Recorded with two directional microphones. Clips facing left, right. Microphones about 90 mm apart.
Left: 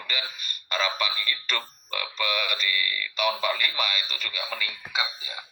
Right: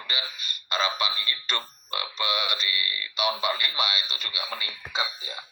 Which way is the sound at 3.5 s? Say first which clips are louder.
Even; 30° right (ahead or behind).